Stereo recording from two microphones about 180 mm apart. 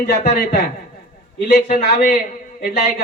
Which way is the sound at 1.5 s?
45° left (ahead or behind).